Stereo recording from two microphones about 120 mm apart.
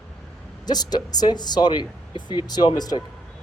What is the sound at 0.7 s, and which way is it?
Speech, 35° left (ahead or behind).